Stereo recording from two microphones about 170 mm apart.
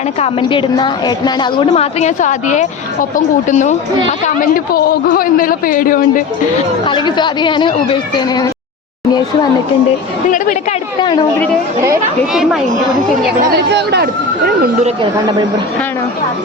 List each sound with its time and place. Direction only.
0.2 s speech: 30° left (ahead or behind)
1.7 s a woman's voice: 40° left (ahead or behind)
4.4 s a man's voice: 60° left (ahead or behind)
6.8 s speech: 25° left (ahead or behind)
10.3 s a woman's voice: 50° left (ahead or behind)
11.0 s speech: 25° left (ahead or behind)
12.3 s speech: centre (ahead or behind)
13.4 s speech: 75° right (ahead or behind)